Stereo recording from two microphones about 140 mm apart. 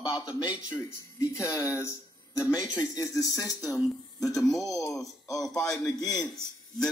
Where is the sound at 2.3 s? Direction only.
10° right (ahead or behind).